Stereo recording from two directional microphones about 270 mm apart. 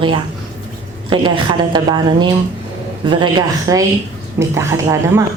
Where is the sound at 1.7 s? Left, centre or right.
Centre.